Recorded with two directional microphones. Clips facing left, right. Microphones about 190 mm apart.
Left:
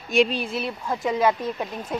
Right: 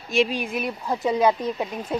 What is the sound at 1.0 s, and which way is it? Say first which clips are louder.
Speech: right 2 dB; 15° right (ahead or behind).